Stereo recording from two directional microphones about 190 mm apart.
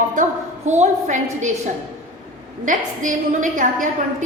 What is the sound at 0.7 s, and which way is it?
A woman's voice, 40° right (ahead or behind).